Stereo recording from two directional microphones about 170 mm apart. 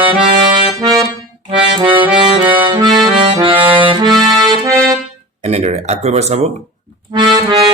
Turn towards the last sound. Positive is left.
turn(degrees=-25)  # may be behind; listen again after turning